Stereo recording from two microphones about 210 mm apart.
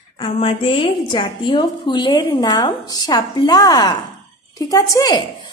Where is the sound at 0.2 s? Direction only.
25° left (ahead or behind).